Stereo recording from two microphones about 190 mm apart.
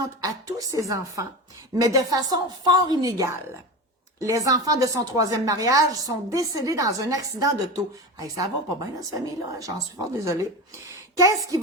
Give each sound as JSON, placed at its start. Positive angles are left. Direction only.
{"t": 0.2, "sound": "a woman's voice", "side_deg": -20}
{"t": 8.8, "sound": "a woman's voice", "side_deg": -20}